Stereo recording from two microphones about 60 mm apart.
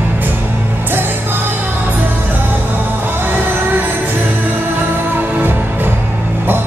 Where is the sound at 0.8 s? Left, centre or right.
Right.